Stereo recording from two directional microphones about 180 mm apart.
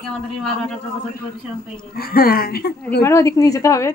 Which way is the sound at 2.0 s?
55° left (ahead or behind).